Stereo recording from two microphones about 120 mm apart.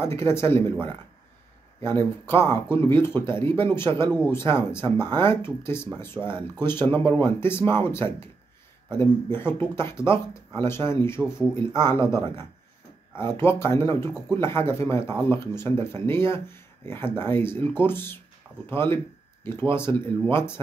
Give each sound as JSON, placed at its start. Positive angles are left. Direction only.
{"t": 0.0, "sound": "speech", "side_deg": 20}
{"t": 1.8, "sound": "speech", "side_deg": 20}